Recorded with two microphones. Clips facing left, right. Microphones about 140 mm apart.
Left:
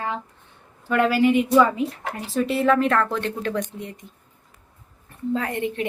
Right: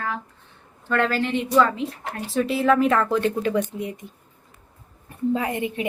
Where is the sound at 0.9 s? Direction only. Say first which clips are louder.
Left 4 dB; 10° left (ahead or behind); by 4.0 s 10° right (ahead or behind).